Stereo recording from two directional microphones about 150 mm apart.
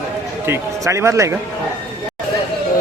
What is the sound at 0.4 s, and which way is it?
Speech, 15° right (ahead or behind).